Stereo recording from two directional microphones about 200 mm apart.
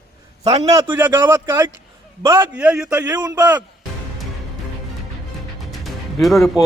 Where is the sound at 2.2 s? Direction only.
20° right (ahead or behind).